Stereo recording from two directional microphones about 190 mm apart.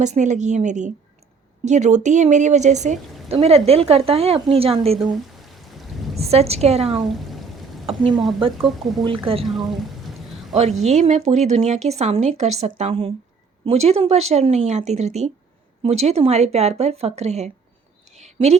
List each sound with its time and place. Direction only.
0.0 s speech: 40° right (ahead or behind)
5.5 s rain: centre (ahead or behind)
6.1 s speech: 35° right (ahead or behind)
7.0 s a sound: centre (ahead or behind)
8.6 s speech: centre (ahead or behind)
9.0 s a woman's voice: 25° right (ahead or behind)
9.4 s speech: centre (ahead or behind)
10.5 s speech: 35° right (ahead or behind)
18.2 s a sound: 35° right (ahead or behind)